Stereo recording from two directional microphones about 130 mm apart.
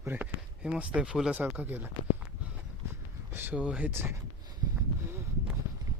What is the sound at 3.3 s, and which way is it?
Speech, 10° right (ahead or behind).